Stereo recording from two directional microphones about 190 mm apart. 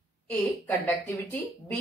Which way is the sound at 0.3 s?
10° left (ahead or behind).